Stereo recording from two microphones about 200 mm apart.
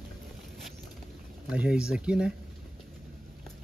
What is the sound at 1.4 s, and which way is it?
Speech, 5° right (ahead or behind).